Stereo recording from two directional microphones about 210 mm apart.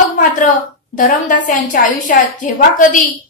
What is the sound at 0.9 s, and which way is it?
A woman's voice, 40° left (ahead or behind).